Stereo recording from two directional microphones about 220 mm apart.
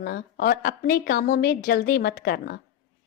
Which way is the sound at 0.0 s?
45° left (ahead or behind).